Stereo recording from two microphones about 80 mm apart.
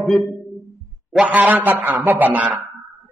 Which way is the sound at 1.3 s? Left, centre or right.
Centre.